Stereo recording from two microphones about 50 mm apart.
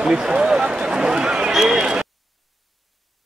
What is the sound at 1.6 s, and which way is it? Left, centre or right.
Speech, centre.